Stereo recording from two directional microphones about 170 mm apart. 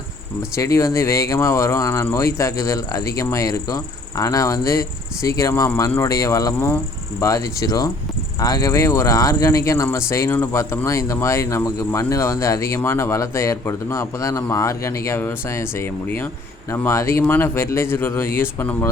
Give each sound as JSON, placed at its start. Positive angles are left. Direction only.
{"t": 0.5, "sound": "speech", "side_deg": 20}